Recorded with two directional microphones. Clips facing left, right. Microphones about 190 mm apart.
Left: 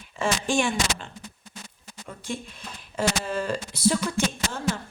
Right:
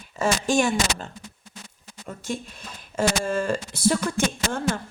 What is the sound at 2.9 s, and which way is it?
Speech, 45° right (ahead or behind).